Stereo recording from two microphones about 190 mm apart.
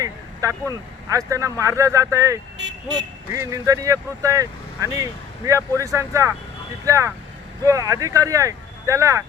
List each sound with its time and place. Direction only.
0.0 s speech: 15° right (ahead or behind)
2.6 s vehicle: 70° right (ahead or behind)
3.3 s speech: 15° right (ahead or behind)